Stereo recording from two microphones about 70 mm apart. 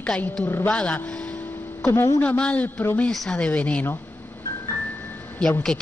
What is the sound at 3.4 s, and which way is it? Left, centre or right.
Speech, centre.